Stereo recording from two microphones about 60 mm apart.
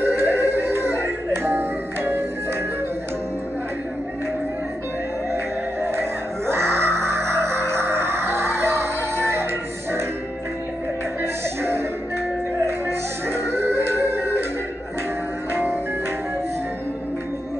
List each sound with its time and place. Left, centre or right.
0.0 s music: right
5.3 s music: right
13.3 s music: right
15.5 s music: right